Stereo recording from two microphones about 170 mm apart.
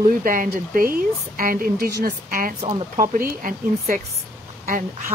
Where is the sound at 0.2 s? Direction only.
55° right (ahead or behind).